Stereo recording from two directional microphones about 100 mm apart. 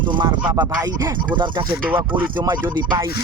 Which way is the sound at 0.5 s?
35° right (ahead or behind).